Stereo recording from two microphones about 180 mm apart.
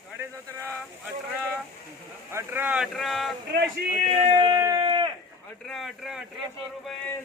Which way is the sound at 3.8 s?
65° right (ahead or behind).